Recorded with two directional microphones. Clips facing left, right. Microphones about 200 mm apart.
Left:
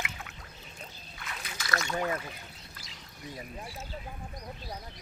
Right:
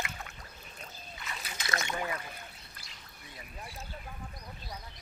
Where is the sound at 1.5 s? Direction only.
20° right (ahead or behind).